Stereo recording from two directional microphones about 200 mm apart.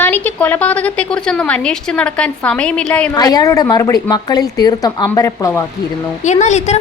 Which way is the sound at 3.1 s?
20° left (ahead or behind).